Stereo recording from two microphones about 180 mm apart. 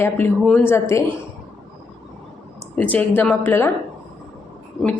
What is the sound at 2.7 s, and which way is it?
Speech, 10° left (ahead or behind).